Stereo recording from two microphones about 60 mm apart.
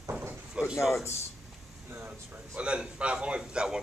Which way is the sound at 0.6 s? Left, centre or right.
Centre.